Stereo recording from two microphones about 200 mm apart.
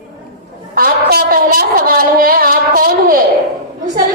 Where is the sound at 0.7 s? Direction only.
50° right (ahead or behind).